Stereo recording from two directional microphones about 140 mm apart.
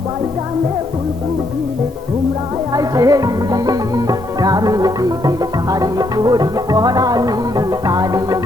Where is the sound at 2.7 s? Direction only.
25° right (ahead or behind).